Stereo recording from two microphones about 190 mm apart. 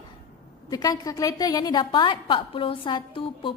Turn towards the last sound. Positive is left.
turn(degrees=25)  # may be behind; listen again after turning